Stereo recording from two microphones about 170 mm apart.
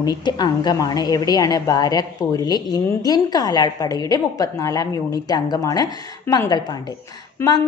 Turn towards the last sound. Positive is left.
turn(degrees=15)  # may be behind; listen again after turning